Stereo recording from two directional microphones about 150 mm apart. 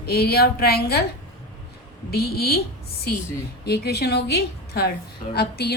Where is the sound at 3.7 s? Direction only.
90° left.